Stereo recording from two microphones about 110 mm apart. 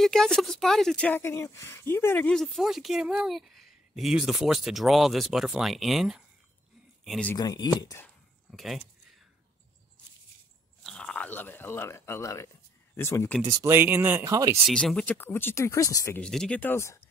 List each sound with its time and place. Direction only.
0.0 s speech: 5° left (ahead or behind)
1.0 s speech: 20° left (ahead or behind)
2.3 s speech: centre (ahead or behind)
7.3 s speech: 35° left (ahead or behind)
8.5 s speech: centre (ahead or behind)
10.8 s a sound: 5° left (ahead or behind); by 12.4 s 30° left (ahead or behind)
12.9 s speech: 25° left (ahead or behind)
13.7 s speech: 20° right (ahead or behind)
14.3 s speech: 30° right (ahead or behind)
14.7 s speech: 5° left (ahead or behind)
15.1 s speech: 20° left (ahead or behind)
16.2 s speech: 10° left (ahead or behind); by 17.0 s 25° left (ahead or behind)